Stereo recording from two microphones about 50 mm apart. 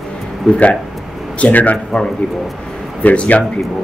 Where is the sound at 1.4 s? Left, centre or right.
Left.